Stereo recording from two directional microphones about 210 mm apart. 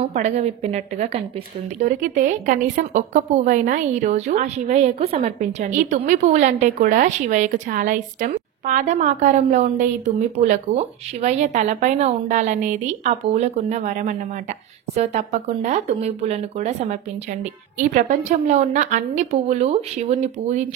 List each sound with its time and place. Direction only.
0.0 s a woman's voice: 30° right (ahead or behind)